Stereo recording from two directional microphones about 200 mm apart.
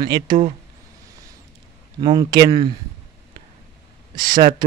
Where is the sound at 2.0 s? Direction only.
20° right (ahead or behind).